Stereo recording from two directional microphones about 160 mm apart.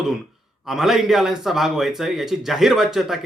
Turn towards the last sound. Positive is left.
turn(degrees=0)  # may be behind; listen again after turning